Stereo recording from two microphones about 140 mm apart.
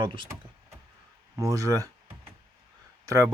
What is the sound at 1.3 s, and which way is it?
Speech, 25° right (ahead or behind).